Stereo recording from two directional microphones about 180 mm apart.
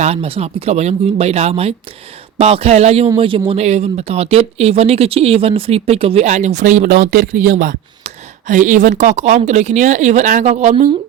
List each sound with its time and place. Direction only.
0.0 s speech: 35° right (ahead or behind)